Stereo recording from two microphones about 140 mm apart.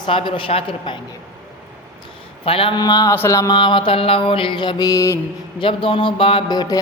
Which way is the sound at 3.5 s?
35° left (ahead or behind).